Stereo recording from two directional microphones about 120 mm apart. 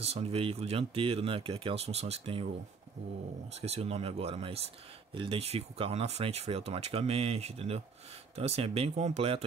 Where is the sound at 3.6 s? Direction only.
60° right (ahead or behind).